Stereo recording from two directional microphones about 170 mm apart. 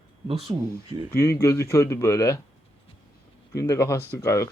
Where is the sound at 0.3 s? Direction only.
35° right (ahead or behind).